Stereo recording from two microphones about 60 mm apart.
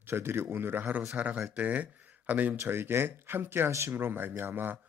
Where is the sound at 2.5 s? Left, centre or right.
Right.